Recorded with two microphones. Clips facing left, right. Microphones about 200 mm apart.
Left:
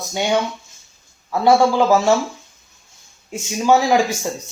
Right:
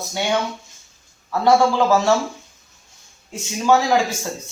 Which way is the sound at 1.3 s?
15° left (ahead or behind).